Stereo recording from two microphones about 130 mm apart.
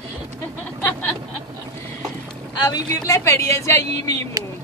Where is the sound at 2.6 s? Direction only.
25° left (ahead or behind).